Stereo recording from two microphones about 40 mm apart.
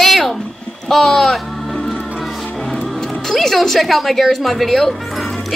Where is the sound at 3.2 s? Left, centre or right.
Centre.